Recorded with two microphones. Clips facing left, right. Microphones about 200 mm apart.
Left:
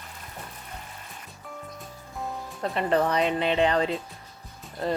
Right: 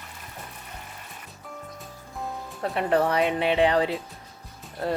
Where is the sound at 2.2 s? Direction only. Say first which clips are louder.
Even; 5° right (ahead or behind).